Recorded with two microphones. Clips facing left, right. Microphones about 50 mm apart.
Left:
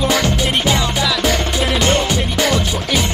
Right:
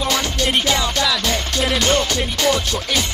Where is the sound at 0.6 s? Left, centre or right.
Centre.